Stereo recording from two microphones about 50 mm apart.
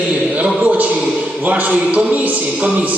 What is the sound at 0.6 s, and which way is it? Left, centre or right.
A man's voice, right.